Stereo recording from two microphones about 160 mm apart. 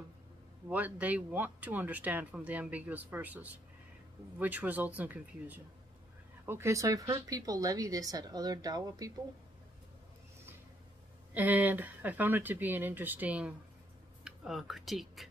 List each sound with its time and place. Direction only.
0.7 s speech: 10° right (ahead or behind)
11.3 s speech: 10° right (ahead or behind)